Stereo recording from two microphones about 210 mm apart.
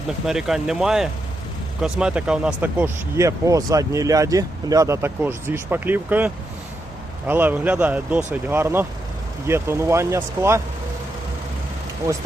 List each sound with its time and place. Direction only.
0.3 s speech: centre (ahead or behind)